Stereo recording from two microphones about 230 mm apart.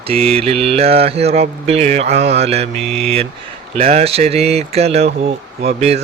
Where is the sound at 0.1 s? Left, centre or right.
Right.